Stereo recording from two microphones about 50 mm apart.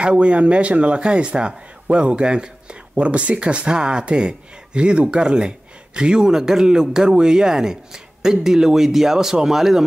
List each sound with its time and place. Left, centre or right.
0.0 s speech: right